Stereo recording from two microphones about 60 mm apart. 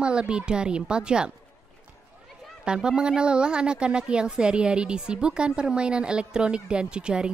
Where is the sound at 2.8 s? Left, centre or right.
Centre.